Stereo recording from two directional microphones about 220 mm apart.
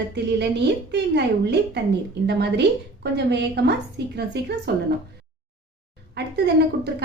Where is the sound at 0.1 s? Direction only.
50° right (ahead or behind).